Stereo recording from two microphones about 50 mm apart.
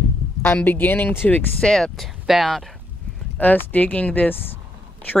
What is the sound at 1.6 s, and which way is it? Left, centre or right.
Speech, centre.